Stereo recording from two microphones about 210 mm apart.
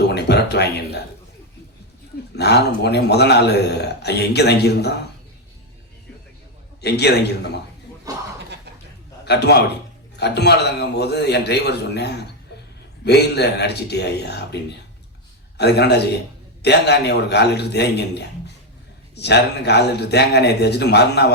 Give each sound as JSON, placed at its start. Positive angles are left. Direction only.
{"t": 0.1, "sound": "a sound", "side_deg": 50}
{"t": 2.3, "sound": "a man's voice", "side_deg": 50}
{"t": 6.8, "sound": "a man's voice", "side_deg": 50}
{"t": 9.2, "sound": "a man's voice", "side_deg": 50}